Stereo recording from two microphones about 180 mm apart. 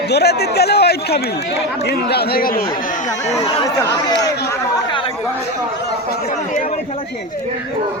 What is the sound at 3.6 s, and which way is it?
Speech, 20° left (ahead or behind).